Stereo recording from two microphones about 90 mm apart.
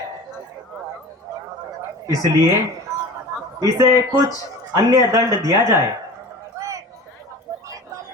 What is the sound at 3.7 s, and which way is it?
Speech, 40° right (ahead or behind).